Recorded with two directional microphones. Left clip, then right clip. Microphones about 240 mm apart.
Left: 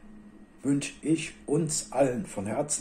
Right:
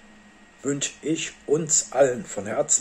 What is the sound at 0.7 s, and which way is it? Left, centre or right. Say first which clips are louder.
Speech: right 1 dB; centre.